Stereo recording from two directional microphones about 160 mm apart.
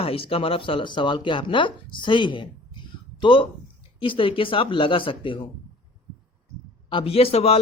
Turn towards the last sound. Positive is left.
turn(degrees=40)  # may be behind; listen again after turning